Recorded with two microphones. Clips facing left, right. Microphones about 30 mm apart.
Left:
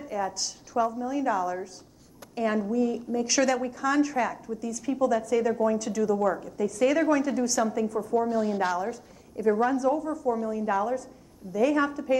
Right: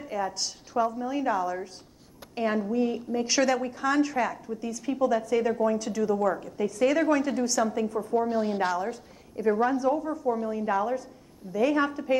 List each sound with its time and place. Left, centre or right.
0.0 s a woman's voice: right
4.2 s a woman's voice: centre
4.6 s a woman's voice: right
5.5 s a woman's voice: centre
6.1 s a woman's voice: centre
6.4 s a woman's voice: right